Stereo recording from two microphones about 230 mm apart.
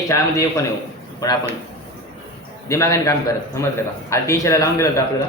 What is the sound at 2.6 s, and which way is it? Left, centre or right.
A man's voice, centre.